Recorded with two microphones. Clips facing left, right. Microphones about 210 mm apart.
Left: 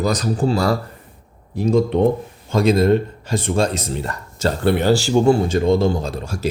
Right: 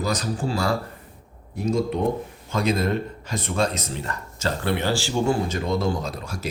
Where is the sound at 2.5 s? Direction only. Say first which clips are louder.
Left 8 dB; 30° left (ahead or behind).